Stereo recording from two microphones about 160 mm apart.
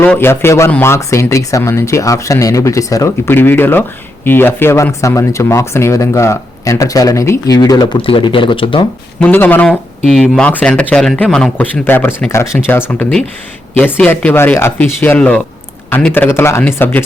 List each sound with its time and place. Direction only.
0.0 s speech: 10° left (ahead or behind); by 8.9 s 35° left (ahead or behind)
9.2 s speech: 10° left (ahead or behind)